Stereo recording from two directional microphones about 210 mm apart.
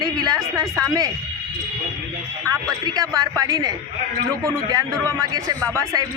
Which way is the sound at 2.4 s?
15° right (ahead or behind).